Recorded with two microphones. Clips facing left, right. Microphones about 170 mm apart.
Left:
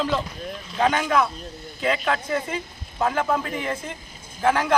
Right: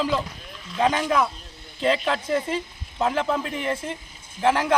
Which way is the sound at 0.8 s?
30° right (ahead or behind).